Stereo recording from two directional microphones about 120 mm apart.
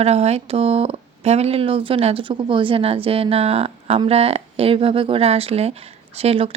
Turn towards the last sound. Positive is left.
turn(degrees=-50)  # may be behind; listen again after turning